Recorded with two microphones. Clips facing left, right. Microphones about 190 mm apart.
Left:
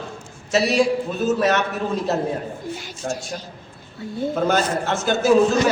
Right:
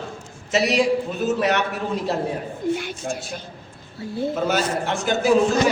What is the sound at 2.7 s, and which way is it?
Speech, 60° right (ahead or behind).